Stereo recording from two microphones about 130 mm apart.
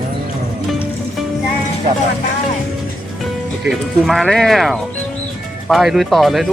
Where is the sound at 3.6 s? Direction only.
Centre (ahead or behind).